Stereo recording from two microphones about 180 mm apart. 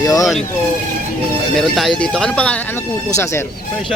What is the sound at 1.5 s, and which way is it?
Speech, centre (ahead or behind).